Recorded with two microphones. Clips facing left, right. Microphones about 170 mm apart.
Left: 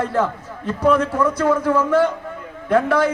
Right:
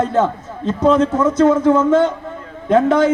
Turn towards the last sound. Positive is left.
turn(degrees=-25)  # may be behind; listen again after turning